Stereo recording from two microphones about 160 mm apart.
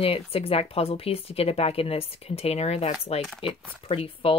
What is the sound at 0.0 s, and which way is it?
Speech, 35° left (ahead or behind).